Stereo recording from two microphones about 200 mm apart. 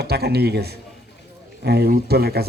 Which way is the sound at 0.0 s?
55° right (ahead or behind).